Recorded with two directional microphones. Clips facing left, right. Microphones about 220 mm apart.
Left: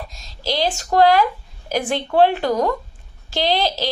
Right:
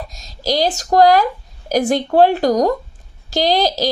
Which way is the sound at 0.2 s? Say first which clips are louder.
Right 4 dB; 40° right (ahead or behind).